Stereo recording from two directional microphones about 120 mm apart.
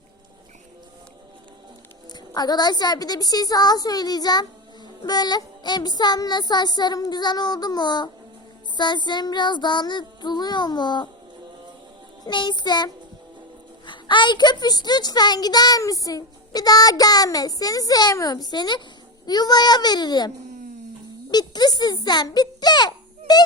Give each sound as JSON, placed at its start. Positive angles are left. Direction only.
{"t": 2.1, "sound": "a child's voice", "side_deg": 35}
{"t": 12.2, "sound": "a child's voice", "side_deg": 40}